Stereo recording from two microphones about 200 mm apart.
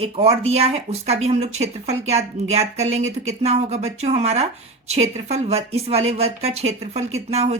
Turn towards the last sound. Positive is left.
turn(degrees=-30)  # may be behind; listen again after turning